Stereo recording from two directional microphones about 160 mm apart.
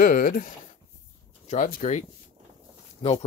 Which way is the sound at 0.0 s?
65° left (ahead or behind).